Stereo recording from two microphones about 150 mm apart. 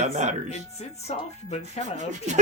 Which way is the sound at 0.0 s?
50° right (ahead or behind).